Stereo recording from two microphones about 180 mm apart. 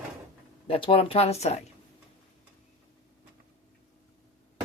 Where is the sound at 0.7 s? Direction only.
30° left (ahead or behind).